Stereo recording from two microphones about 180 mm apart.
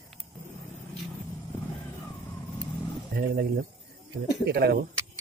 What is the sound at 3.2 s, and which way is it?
Speech, 55° right (ahead or behind).